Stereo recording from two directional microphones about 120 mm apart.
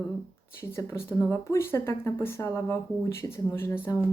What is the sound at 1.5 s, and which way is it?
Speech, 20° left (ahead or behind).